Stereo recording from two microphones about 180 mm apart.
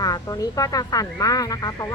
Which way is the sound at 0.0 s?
20° left (ahead or behind).